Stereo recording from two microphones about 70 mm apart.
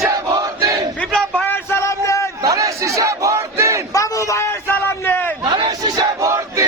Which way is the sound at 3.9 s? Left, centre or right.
Left.